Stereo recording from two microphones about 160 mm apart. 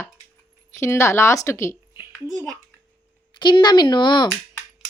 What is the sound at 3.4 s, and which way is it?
Speech, 30° left (ahead or behind).